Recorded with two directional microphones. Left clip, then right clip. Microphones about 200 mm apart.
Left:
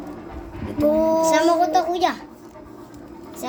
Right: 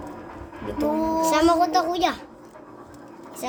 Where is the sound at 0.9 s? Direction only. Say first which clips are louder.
Left 7 dB; 5° right (ahead or behind).